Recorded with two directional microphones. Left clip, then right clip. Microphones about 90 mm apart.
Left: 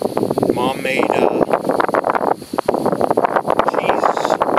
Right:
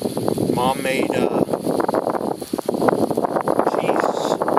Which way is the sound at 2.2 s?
55° left (ahead or behind).